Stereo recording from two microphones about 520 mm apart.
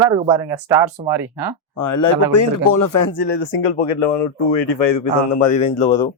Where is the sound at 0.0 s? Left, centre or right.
Centre.